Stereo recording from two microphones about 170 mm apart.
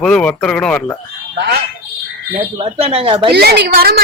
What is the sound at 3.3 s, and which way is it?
Speech, 70° right (ahead or behind).